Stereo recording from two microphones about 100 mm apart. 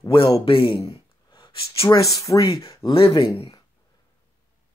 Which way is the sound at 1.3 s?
55° left (ahead or behind).